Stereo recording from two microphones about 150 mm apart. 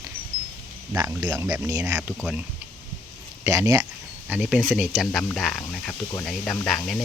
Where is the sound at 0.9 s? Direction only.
15° right (ahead or behind).